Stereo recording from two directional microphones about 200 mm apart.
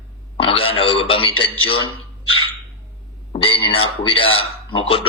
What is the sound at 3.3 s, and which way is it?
A man's voice, 25° left (ahead or behind).